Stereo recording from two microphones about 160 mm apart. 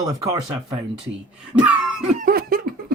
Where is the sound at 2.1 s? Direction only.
65° right (ahead or behind).